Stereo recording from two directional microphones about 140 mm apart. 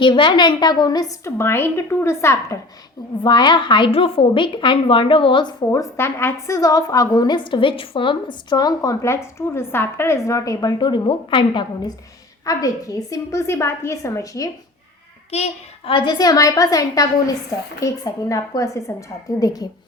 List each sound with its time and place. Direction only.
0.0 s a woman's voice: 35° left (ahead or behind); by 2.6 s 20° left (ahead or behind)
3.2 s a woman's voice: 35° left (ahead or behind)
6.0 s a woman's voice: 15° left (ahead or behind); by 11.6 s 35° left (ahead or behind)
12.5 s a woman's voice: 25° left (ahead or behind)
15.3 s a child's voice: 50° left (ahead or behind)
15.9 s a woman's voice: 35° left (ahead or behind)